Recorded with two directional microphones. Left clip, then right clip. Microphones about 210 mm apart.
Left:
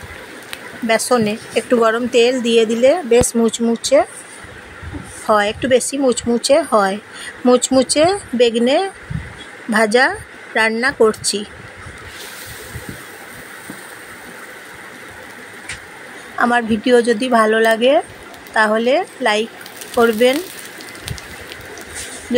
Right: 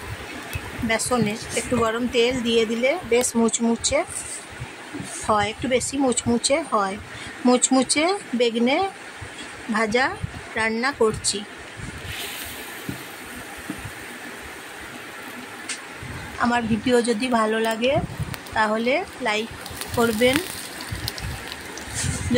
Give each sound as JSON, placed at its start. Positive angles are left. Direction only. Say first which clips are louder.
{"t": 0.8, "sound": "speech", "louder": "left 8 dB", "side_deg": 15}
{"t": 5.2, "sound": "speech", "louder": "left 7 dB", "side_deg": 10}
{"t": 16.3, "sound": "speech", "louder": "left 7 dB", "side_deg": 15}